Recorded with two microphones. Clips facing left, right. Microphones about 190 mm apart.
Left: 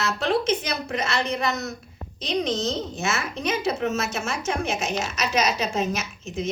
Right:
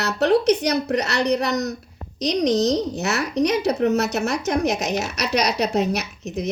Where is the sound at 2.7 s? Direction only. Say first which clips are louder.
Right 5 dB; 70° right (ahead or behind).